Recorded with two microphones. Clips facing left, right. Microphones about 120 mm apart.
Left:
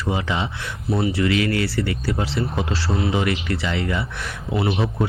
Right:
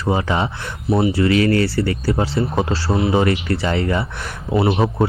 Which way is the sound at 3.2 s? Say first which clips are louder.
Right 5 dB; 40° right (ahead or behind).